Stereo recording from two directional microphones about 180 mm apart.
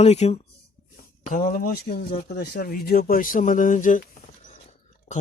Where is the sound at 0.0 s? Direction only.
35° left (ahead or behind).